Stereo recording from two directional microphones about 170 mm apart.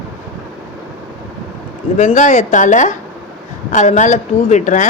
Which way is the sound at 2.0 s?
45° left (ahead or behind).